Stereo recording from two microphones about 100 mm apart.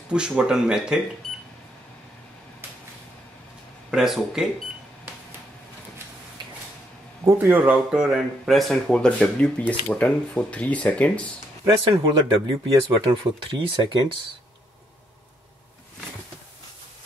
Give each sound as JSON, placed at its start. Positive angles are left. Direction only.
{"t": 0.1, "sound": "speech", "side_deg": -10}
{"t": 3.9, "sound": "speech", "side_deg": -5}
{"t": 7.2, "sound": "speech", "side_deg": -20}
{"t": 11.6, "sound": "speech", "side_deg": -35}
{"t": 12.8, "sound": "speech", "side_deg": -55}